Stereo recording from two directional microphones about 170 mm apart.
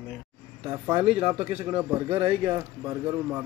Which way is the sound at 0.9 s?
35° right (ahead or behind).